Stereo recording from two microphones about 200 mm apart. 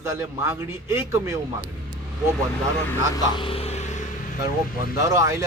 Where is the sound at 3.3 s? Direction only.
25° left (ahead or behind).